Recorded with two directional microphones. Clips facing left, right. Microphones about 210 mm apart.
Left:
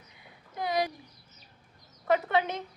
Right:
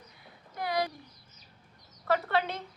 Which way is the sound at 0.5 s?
20° left (ahead or behind).